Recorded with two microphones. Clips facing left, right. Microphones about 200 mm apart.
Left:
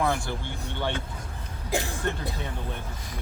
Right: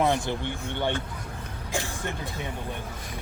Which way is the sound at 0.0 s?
20° right (ahead or behind).